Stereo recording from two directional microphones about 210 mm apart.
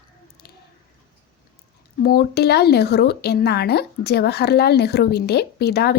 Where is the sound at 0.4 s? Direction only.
50° left (ahead or behind).